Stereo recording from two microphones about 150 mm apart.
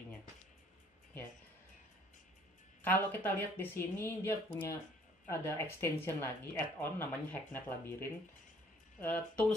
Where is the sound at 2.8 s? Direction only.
10° left (ahead or behind).